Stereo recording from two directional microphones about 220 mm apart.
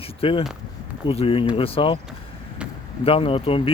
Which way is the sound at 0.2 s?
25° left (ahead or behind).